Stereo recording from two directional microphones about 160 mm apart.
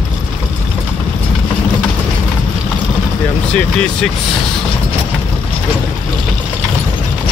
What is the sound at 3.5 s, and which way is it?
Speech, 5° left (ahead or behind).